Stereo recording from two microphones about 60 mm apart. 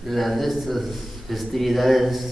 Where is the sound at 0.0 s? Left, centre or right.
Centre.